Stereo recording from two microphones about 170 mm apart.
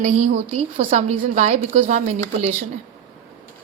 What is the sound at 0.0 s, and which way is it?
A woman's voice, 40° right (ahead or behind).